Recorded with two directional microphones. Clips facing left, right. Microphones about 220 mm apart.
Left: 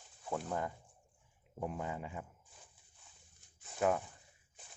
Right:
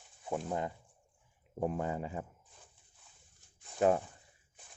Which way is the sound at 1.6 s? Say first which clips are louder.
Right 6 dB; 40° right (ahead or behind).